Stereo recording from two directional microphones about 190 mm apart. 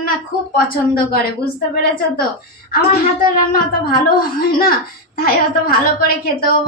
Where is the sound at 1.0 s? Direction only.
55° left (ahead or behind).